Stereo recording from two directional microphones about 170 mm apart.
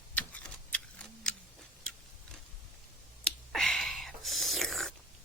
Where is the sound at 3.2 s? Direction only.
5° left (ahead or behind).